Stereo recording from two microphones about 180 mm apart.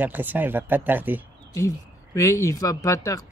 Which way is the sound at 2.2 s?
15° left (ahead or behind).